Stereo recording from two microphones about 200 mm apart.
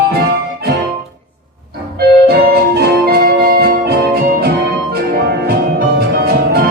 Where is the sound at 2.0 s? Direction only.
50° right (ahead or behind).